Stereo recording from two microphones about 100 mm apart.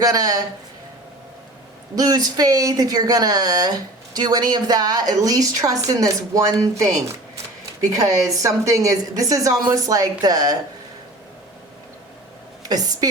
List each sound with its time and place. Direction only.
0.0 s a woman's voice: 35° right (ahead or behind)
2.0 s a woman's voice: 40° right (ahead or behind)
7.9 s a woman's voice: 35° right (ahead or behind)
12.6 s a woman's voice: 40° right (ahead or behind)